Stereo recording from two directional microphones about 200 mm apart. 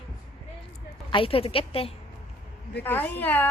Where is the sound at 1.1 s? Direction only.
25° left (ahead or behind).